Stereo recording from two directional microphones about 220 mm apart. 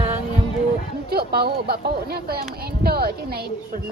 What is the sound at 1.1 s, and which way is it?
Speech, 45° right (ahead or behind).